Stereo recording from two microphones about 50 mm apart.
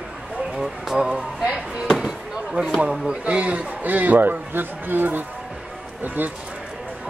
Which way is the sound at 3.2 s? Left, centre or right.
Right.